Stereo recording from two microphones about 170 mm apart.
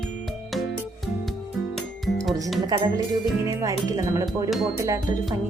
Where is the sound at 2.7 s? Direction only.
20° right (ahead or behind).